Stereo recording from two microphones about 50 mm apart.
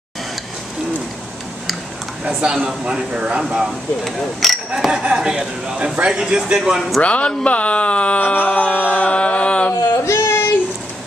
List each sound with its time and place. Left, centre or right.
2.2 s speech: centre
4.0 s speech: centre
7.0 s speech: left
9.7 s a sound: left